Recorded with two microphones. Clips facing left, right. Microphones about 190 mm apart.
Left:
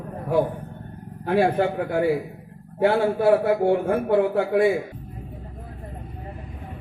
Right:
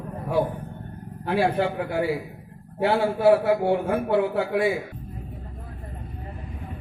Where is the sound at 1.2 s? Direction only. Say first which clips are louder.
Left 3 dB; 50° left (ahead or behind).